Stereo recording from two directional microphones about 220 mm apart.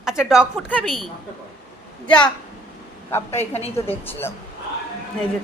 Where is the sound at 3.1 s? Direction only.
10° left (ahead or behind).